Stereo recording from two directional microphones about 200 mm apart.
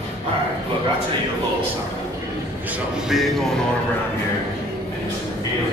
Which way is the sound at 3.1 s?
Centre (ahead or behind).